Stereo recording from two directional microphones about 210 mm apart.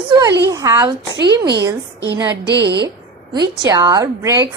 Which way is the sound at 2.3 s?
55° right (ahead or behind).